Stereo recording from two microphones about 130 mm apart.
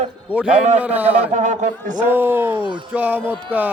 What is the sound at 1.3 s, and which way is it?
Speech, 70° right (ahead or behind).